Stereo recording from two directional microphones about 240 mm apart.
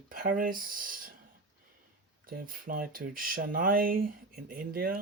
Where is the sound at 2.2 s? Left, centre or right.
Right.